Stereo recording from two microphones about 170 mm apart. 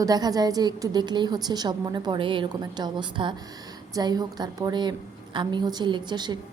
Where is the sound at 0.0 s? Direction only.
20° right (ahead or behind).